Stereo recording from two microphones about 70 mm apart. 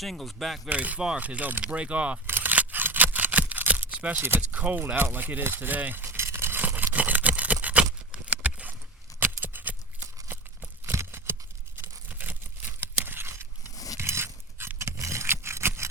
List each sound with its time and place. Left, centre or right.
0.0 s speech: centre
0.7 s speech: right
2.2 s a sound: right
4.9 s speech: right
6.1 s a sound: right
11.3 s scissors: right
11.8 s tearing: right
13.7 s a sound: left
14.0 s dog: right
14.8 s scrape: right